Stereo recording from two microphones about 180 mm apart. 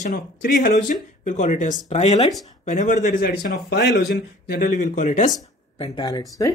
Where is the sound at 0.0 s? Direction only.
50° left (ahead or behind).